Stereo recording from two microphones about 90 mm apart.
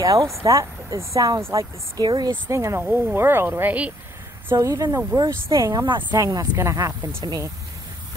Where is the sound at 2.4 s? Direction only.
30° right (ahead or behind).